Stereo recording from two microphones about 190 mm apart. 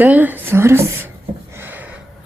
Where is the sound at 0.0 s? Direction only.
10° right (ahead or behind).